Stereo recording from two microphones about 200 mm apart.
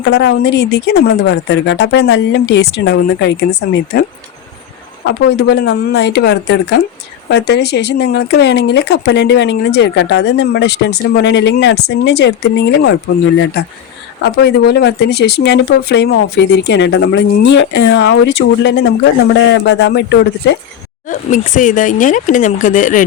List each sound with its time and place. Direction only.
0.0 s speech: 60° left (ahead or behind)
5.0 s speech: 55° left (ahead or behind)
21.1 s speech: 40° left (ahead or behind)